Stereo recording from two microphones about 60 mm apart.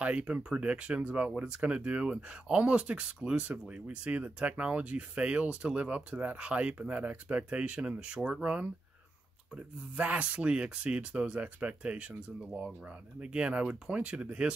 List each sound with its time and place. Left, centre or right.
0.0 s speech: right
9.9 s speech: right